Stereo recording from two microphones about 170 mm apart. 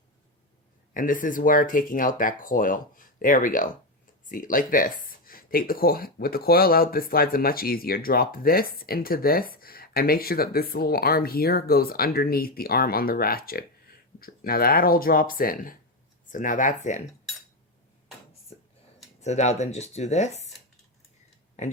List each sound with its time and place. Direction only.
0.9 s speech: 50° left (ahead or behind)
19.2 s speech: 40° left (ahead or behind)